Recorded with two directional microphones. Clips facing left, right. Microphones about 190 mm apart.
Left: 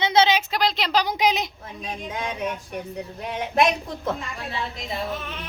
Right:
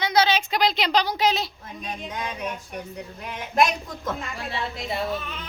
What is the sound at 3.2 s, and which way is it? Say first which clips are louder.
Speech: left 1 dB; 30° left (ahead or behind).